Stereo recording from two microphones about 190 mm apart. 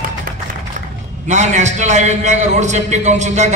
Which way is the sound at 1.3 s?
40° right (ahead or behind).